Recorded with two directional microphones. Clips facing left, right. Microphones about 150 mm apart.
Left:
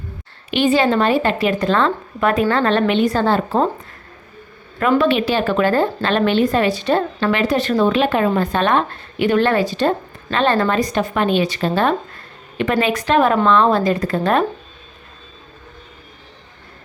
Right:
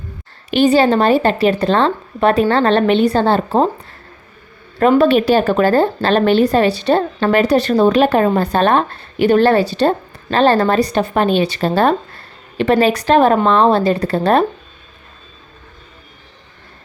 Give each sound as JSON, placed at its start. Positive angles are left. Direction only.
{"t": 0.5, "sound": "speech", "side_deg": -35}
{"t": 4.8, "sound": "speech", "side_deg": -35}